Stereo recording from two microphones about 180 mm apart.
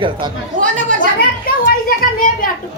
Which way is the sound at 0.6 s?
45° right (ahead or behind).